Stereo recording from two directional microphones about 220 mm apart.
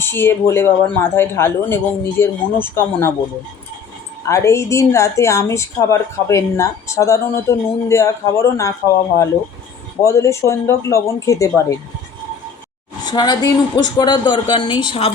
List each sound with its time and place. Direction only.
0.0 s a woman's voice: 10° left (ahead or behind)
4.3 s a woman's voice: 15° left (ahead or behind)
10.1 s a woman's voice: 15° left (ahead or behind)
13.1 s speech: 20° left (ahead or behind)